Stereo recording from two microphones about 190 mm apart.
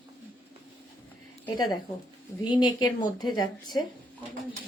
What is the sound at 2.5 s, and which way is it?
Speech, 20° left (ahead or behind).